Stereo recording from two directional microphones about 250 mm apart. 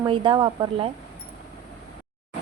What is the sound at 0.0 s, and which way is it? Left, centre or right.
Speech, centre.